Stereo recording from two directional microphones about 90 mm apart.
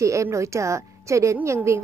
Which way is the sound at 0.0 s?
35° right (ahead or behind).